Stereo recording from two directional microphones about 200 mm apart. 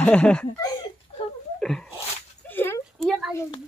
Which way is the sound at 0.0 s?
5° left (ahead or behind).